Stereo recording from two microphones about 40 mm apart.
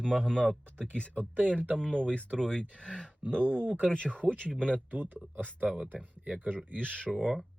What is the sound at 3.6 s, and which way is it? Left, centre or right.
Speech, right.